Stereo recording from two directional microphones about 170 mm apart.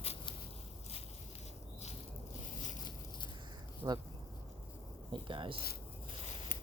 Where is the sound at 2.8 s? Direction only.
25° left (ahead or behind).